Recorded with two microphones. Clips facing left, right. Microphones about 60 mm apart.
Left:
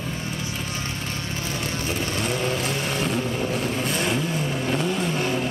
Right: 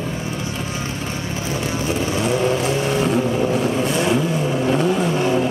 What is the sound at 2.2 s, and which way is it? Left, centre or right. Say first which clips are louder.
Vehicle: right 8 dB; centre.